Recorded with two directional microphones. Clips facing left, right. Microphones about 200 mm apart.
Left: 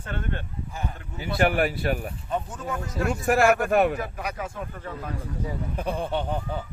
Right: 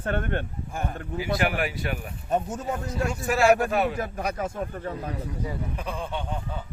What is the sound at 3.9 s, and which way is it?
Speech, 45° right (ahead or behind).